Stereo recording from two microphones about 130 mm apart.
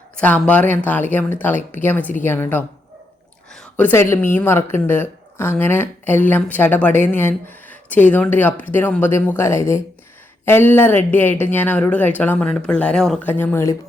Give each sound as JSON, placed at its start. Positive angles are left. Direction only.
{"t": 0.2, "sound": "a woman's voice", "side_deg": 10}